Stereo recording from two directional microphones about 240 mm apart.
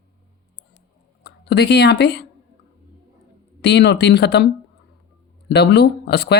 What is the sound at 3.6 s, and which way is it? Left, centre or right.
Speech, left.